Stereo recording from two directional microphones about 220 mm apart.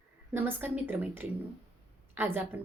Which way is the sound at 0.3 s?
10° right (ahead or behind).